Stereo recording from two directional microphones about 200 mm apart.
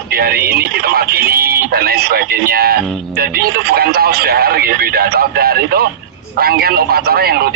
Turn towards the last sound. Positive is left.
turn(degrees=-50)  # may be behind; listen again after turning